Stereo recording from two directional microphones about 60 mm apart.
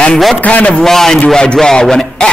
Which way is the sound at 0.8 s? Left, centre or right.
Centre.